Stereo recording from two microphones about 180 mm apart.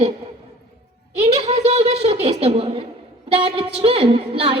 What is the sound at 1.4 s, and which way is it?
A woman's voice, 35° right (ahead or behind).